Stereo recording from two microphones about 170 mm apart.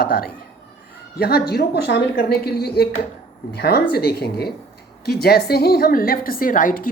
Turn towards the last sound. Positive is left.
turn(degrees=55)  # may be behind; listen again after turning